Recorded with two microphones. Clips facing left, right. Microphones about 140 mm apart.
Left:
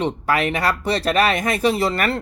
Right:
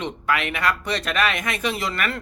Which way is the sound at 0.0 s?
35° left (ahead or behind).